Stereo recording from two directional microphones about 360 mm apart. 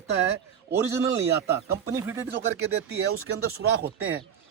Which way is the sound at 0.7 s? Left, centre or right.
Centre.